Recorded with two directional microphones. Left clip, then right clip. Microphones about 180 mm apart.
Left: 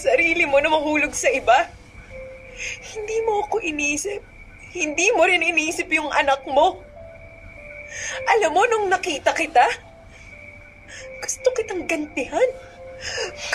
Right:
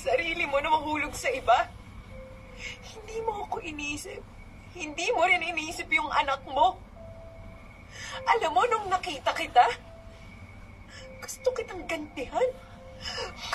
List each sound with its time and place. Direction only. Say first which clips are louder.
0.0 s a woman's voice: left 9 dB; 30° left (ahead or behind)
7.9 s a woman's voice: left 6 dB; 30° left (ahead or behind)
11.0 s a woman's voice: left 11 dB; 30° left (ahead or behind)